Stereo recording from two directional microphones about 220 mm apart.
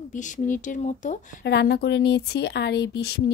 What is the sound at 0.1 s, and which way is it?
Speech, 35° left (ahead or behind).